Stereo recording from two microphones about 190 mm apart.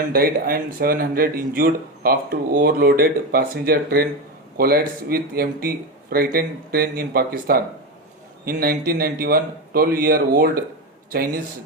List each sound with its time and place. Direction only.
0.1 s speech: 50° right (ahead or behind)